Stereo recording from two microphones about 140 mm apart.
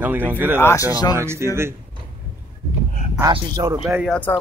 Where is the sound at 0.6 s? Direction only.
15° left (ahead or behind).